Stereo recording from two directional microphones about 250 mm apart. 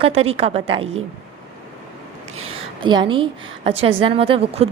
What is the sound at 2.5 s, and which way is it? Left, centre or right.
A woman's voice, right.